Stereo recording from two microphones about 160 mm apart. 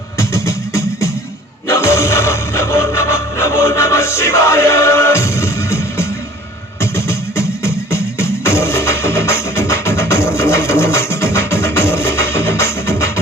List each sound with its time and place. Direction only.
0.2 s music: 20° left (ahead or behind)